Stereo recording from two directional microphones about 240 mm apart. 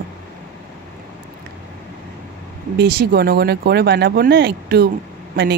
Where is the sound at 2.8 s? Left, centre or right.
Right.